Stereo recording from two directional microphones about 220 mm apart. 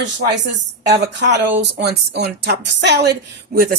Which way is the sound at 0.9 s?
50° right (ahead or behind).